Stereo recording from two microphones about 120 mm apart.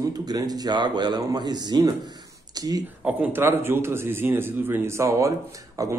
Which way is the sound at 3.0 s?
15° right (ahead or behind).